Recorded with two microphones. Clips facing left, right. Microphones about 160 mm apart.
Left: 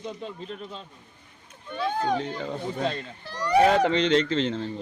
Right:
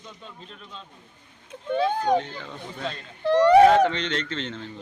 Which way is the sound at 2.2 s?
40° left (ahead or behind).